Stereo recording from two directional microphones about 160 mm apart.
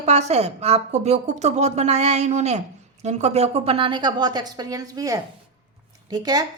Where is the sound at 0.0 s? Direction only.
45° right (ahead or behind).